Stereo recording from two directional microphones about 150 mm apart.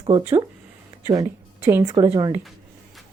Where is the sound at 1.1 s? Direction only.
20° right (ahead or behind).